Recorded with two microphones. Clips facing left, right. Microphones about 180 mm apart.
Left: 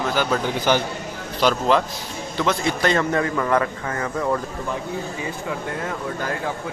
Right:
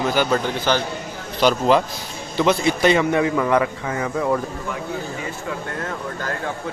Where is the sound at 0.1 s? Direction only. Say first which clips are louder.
Right 2 dB; centre (ahead or behind).